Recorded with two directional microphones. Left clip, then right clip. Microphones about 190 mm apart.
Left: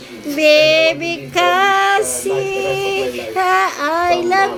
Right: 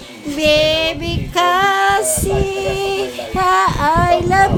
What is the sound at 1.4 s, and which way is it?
Female singing, 20° right (ahead or behind).